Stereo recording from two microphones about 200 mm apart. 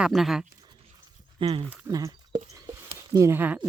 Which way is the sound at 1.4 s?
25° right (ahead or behind).